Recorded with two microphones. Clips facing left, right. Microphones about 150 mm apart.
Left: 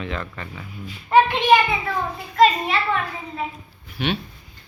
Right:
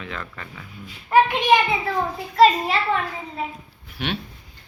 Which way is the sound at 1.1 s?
10° right (ahead or behind).